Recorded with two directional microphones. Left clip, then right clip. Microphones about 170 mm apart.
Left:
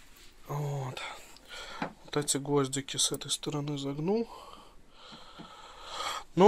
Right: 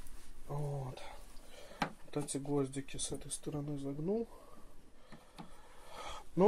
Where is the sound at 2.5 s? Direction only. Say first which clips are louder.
Left 6 dB; 10° left (ahead or behind).